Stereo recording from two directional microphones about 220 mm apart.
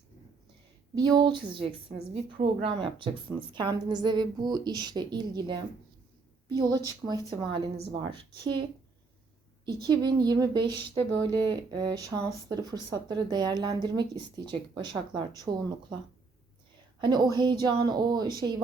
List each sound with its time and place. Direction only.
0.9 s speech: 20° right (ahead or behind)
9.8 s speech: 20° right (ahead or behind)
17.0 s speech: 20° right (ahead or behind)